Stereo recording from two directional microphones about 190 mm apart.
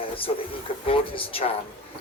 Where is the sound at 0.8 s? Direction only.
30° left (ahead or behind).